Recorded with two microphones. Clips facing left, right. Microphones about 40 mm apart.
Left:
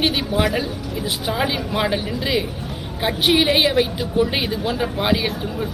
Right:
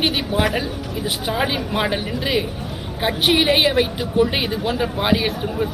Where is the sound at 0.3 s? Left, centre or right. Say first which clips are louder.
Even; right.